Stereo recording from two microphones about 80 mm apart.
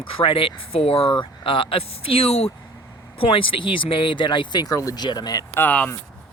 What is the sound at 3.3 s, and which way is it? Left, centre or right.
Speech, left.